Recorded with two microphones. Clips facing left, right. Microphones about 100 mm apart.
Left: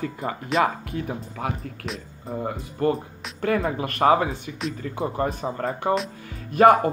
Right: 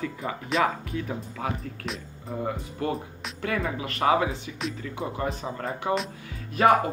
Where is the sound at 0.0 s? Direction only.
45° left (ahead or behind).